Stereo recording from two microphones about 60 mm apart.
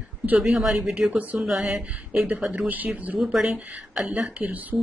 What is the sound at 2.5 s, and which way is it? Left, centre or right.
Speech, right.